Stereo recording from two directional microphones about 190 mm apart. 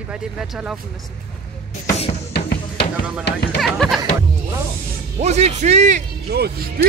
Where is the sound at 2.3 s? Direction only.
60° left (ahead or behind).